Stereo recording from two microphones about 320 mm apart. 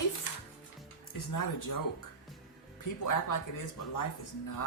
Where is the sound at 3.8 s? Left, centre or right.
Left.